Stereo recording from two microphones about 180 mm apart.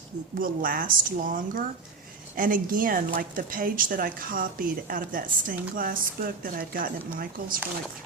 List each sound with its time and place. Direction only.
0.3 s a woman's voice: 50° right (ahead or behind)